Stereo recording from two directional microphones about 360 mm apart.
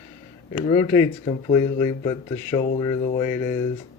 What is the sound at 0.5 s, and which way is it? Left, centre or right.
Speech, centre.